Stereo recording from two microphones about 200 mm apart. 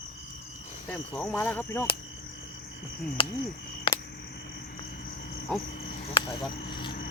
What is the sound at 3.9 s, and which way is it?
Cricket, 25° left (ahead or behind).